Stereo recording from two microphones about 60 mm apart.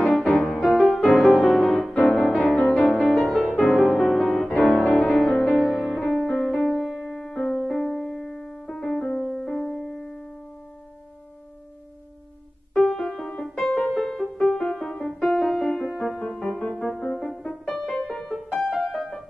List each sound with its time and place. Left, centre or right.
0.0 s music: centre
2.4 s music: centre
2.7 s music: centre
12.7 s music: centre
16.2 s music: centre